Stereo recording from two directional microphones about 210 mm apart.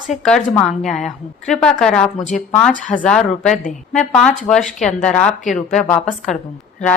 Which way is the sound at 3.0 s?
5° left (ahead or behind).